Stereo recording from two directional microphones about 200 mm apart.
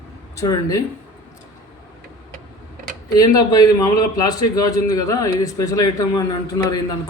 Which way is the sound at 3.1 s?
20° left (ahead or behind).